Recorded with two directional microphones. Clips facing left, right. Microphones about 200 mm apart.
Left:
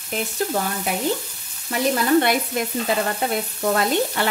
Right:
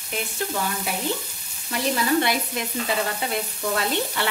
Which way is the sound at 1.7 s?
50° left (ahead or behind).